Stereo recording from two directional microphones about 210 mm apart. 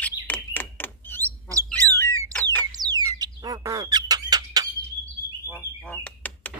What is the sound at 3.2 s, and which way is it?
Bird, 15° right (ahead or behind).